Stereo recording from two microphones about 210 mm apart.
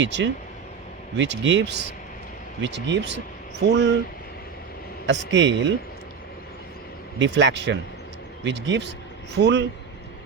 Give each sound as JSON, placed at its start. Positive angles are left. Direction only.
{"t": 0.0, "sound": "speech", "side_deg": -55}
{"t": 5.0, "sound": "speech", "side_deg": -60}
{"t": 7.2, "sound": "speech", "side_deg": -60}